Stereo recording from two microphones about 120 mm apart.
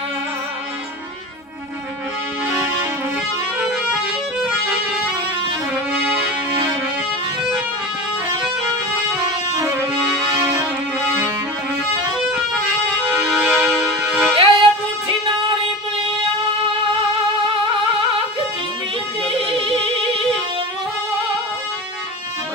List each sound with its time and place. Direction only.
3.6 s music: 5° right (ahead or behind)
13.3 s music: centre (ahead or behind)
14.3 s music: 50° right (ahead or behind)
17.4 s music: 45° right (ahead or behind)
19.6 s music: 50° right (ahead or behind)